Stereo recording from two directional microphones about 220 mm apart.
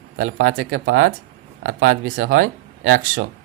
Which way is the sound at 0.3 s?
65° right (ahead or behind).